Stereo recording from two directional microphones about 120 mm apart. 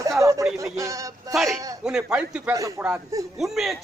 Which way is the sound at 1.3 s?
Centre (ahead or behind).